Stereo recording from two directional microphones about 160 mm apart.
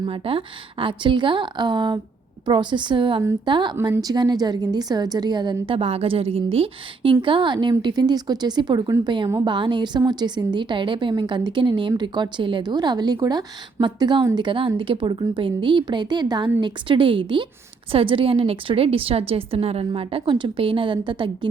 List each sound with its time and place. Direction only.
0.0 s a woman's voice: 35° right (ahead or behind)